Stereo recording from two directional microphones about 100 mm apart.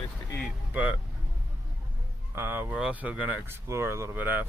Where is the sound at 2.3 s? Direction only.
20° right (ahead or behind).